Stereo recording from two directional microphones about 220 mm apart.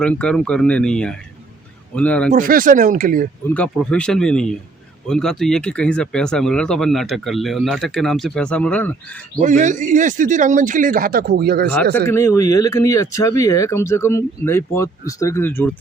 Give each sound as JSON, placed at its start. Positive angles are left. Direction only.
{"t": 0.0, "sound": "speech", "side_deg": 5}
{"t": 2.3, "sound": "speech", "side_deg": -40}
{"t": 3.5, "sound": "speech", "side_deg": 5}
{"t": 9.4, "sound": "speech", "side_deg": -35}
{"t": 11.9, "sound": "speech", "side_deg": 10}